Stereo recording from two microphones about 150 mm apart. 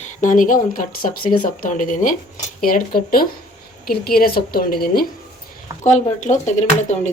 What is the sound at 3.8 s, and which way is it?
A woman's voice, 90° left.